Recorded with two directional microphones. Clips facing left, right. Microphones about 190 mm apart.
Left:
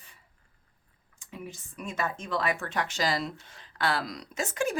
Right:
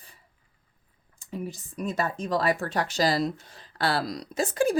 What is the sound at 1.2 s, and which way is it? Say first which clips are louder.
Speech: right 7 dB; 35° right (ahead or behind).